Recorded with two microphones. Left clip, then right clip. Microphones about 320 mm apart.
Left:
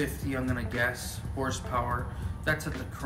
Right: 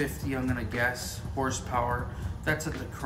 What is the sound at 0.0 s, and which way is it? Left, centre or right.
Speech, centre.